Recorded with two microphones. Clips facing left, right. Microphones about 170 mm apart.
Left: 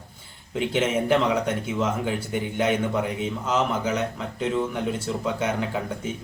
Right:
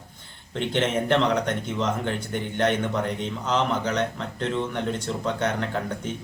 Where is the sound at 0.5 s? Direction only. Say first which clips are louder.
Left 1 dB; 5° left (ahead or behind).